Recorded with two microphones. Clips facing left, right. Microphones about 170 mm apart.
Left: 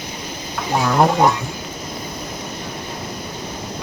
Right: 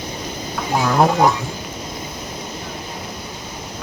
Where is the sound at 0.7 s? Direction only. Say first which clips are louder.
Even; centre (ahead or behind).